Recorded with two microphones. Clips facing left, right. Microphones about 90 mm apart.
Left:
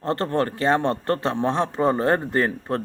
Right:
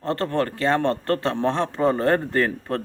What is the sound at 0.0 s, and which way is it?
A man's voice, 20° left (ahead or behind).